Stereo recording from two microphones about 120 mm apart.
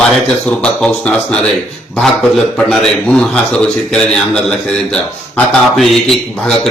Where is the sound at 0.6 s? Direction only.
10° left (ahead or behind).